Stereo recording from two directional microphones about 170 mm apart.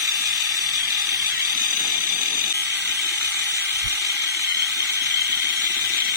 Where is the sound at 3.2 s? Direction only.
20° right (ahead or behind).